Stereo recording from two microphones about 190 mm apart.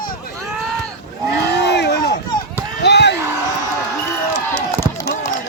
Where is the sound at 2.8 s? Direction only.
60° left (ahead or behind).